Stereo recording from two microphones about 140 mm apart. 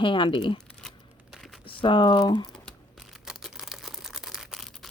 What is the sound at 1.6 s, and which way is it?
Speech, 35° left (ahead or behind).